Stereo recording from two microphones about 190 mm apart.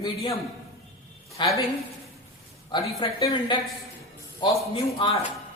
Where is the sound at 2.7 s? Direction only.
30° left (ahead or behind).